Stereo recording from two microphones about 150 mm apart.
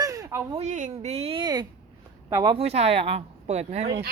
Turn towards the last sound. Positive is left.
turn(degrees=-45)  # may be behind; listen again after turning